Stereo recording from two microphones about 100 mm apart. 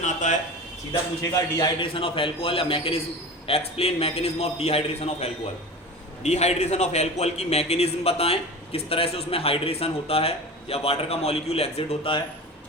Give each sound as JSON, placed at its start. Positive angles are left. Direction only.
{"t": 1.2, "sound": "a man's voice", "side_deg": 40}
{"t": 1.8, "sound": "a man's voice", "side_deg": 60}
{"t": 3.4, "sound": "a man's voice", "side_deg": 80}